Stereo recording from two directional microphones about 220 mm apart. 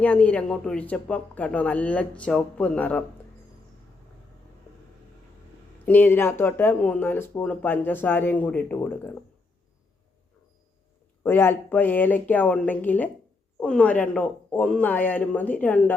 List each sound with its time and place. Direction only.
0.0 s speech: 5° left (ahead or behind)
5.8 s speech: 10° left (ahead or behind)
11.2 s speech: 10° left (ahead or behind)